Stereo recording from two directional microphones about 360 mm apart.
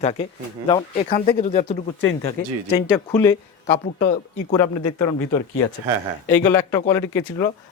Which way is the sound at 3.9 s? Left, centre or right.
Centre.